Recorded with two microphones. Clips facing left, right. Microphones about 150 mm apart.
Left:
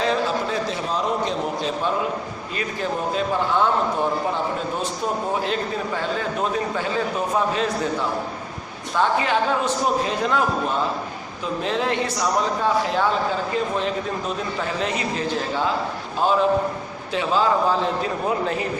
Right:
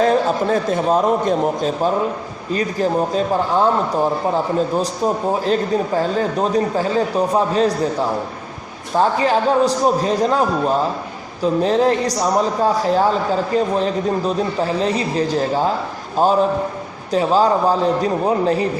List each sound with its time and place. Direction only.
0.0 s a man's voice: 45° right (ahead or behind)
5.5 s a man's voice: 40° right (ahead or behind)
11.6 s a man's voice: 40° right (ahead or behind)
17.1 s a man's voice: 40° right (ahead or behind)